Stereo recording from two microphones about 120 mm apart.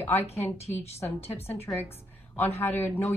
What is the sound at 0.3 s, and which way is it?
Speech, 65° left (ahead or behind).